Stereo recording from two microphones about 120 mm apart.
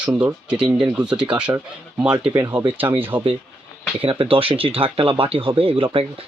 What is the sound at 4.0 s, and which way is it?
Speech, 50° right (ahead or behind).